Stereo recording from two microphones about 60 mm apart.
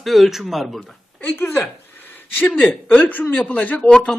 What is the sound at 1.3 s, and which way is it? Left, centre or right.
Speech, left.